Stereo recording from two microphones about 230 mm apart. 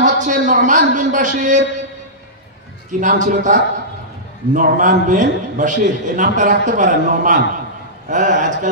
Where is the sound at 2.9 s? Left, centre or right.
Right.